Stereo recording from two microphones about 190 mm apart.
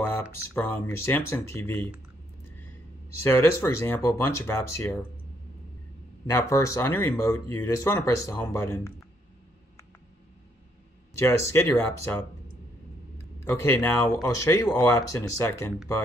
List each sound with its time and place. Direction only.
0.0 s speech: 10° left (ahead or behind)
3.3 s speech: 15° left (ahead or behind)
6.2 s speech: 15° left (ahead or behind)
11.2 s speech: 15° left (ahead or behind)
13.5 s speech: 15° left (ahead or behind)